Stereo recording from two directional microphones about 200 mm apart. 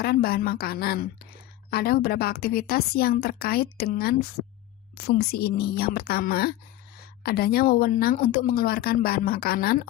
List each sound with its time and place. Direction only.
0.0 s a woman's voice: 50° left (ahead or behind)